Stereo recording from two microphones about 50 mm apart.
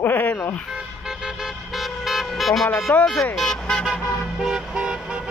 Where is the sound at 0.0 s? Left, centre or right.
Left.